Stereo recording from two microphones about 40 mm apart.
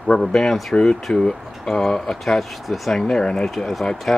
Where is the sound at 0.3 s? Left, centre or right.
Centre.